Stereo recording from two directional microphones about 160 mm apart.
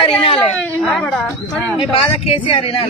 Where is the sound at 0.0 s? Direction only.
35° left (ahead or behind).